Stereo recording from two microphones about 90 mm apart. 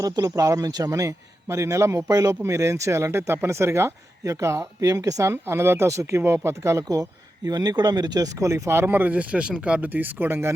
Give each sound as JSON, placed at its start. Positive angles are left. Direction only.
{"t": 0.0, "sound": "speech", "side_deg": -40}
{"t": 5.3, "sound": "speech", "side_deg": -30}